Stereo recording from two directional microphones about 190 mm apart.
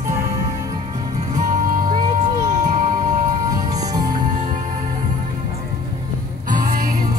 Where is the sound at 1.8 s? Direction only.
20° right (ahead or behind).